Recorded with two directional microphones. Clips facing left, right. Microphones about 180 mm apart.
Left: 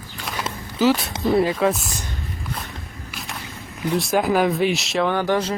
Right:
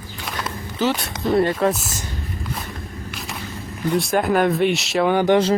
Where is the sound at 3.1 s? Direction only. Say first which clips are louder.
Even; centre (ahead or behind).